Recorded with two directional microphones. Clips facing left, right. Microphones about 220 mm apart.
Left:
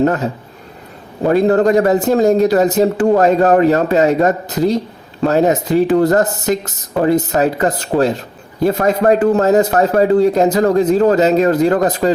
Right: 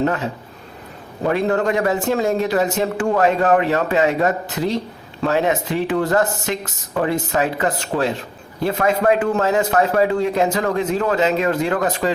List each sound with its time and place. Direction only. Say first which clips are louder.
0.0 s a man's voice: left 5 dB; 40° left (ahead or behind)